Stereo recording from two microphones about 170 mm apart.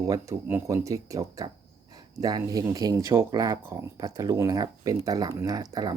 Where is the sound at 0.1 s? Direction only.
15° right (ahead or behind).